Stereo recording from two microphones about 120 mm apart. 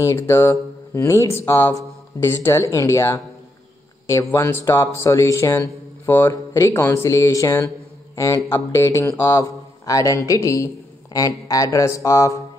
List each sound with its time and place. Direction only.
0.0 s a man's voice: 25° left (ahead or behind)